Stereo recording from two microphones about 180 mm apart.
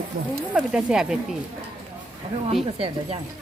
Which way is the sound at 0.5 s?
5° right (ahead or behind).